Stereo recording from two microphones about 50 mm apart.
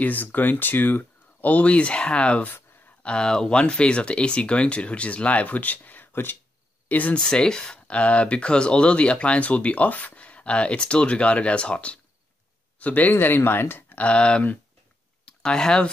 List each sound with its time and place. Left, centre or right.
0.0 s speech: left
3.1 s speech: centre; by 7.2 s left
7.2 s speech: centre; by 13.9 s left
13.9 s speech: left